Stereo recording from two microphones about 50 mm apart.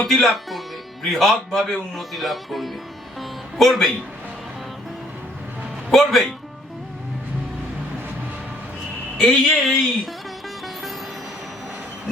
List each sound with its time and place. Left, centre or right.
0.0 s speech: centre
3.2 s music: centre
5.9 s speech: centre
9.2 s speech: centre